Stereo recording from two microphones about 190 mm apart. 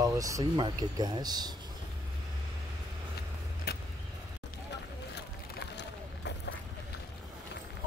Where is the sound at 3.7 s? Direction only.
55° left (ahead or behind).